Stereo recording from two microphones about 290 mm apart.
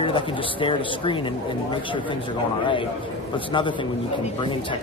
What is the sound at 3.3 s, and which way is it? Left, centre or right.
Speech, centre.